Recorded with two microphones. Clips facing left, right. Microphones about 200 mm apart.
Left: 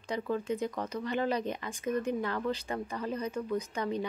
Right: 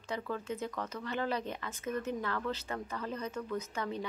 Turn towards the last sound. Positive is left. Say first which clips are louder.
# left 4 dB
turn(degrees=15)  # may be behind; listen again after turning